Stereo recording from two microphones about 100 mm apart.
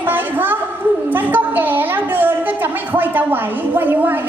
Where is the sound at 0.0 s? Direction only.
20° right (ahead or behind).